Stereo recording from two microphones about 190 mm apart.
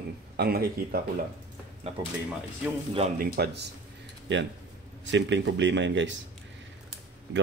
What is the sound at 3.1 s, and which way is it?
Speech, 55° right (ahead or behind).